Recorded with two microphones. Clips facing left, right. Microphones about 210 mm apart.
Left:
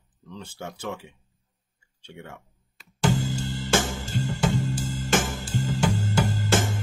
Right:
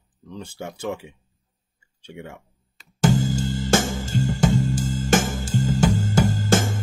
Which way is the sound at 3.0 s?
45° right (ahead or behind).